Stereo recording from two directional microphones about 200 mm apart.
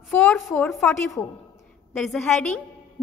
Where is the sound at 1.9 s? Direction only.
5° left (ahead or behind).